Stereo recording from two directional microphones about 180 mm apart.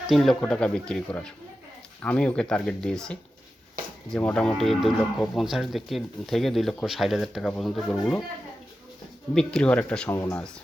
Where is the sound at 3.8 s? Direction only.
50° right (ahead or behind).